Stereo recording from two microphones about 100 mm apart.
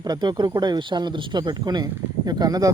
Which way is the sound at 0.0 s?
45° right (ahead or behind).